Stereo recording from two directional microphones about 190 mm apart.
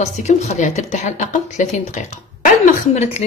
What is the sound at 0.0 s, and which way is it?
A woman's voice, 40° left (ahead or behind).